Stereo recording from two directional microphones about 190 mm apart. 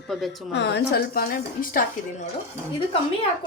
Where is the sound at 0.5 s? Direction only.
65° left (ahead or behind); by 2.2 s 45° left (ahead or behind).